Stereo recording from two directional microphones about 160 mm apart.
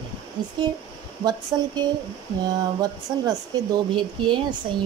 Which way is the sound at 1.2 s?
25° right (ahead or behind).